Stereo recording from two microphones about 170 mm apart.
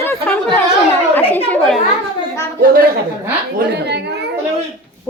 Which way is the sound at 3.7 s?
80° right.